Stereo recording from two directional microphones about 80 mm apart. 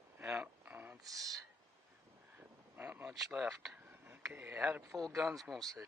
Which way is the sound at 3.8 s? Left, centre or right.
Right.